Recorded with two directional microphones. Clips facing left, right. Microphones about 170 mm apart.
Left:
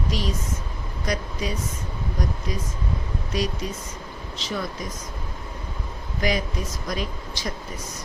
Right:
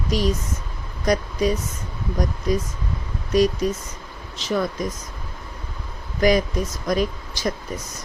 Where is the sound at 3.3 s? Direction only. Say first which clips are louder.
Right 9 dB; 45° right (ahead or behind).